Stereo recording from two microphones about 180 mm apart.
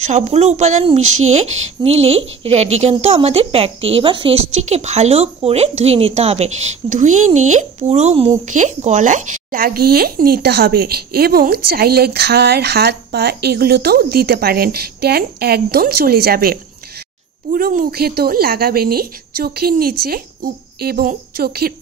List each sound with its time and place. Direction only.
0.0 s a woman's voice: 40° right (ahead or behind); by 21.7 s 60° right (ahead or behind)